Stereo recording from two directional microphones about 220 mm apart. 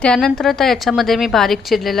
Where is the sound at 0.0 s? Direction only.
5° left (ahead or behind).